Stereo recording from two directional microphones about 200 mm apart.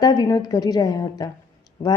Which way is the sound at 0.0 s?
20° left (ahead or behind).